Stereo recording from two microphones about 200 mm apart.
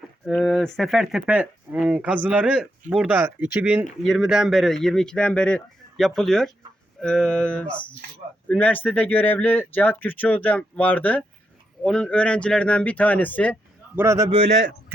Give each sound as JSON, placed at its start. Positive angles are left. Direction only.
{"t": 0.3, "sound": "speech", "side_deg": 0}
{"t": 13.9, "sound": "a man's voice", "side_deg": -15}